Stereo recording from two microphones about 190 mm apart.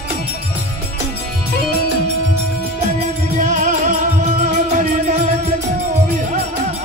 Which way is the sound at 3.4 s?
40° right (ahead or behind).